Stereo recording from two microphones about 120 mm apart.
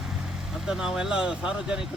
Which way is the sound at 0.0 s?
5° right (ahead or behind).